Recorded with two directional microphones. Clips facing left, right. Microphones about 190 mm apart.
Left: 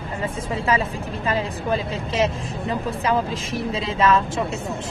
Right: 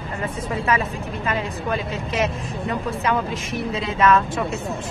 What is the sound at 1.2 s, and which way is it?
A woman's voice, 30° left (ahead or behind).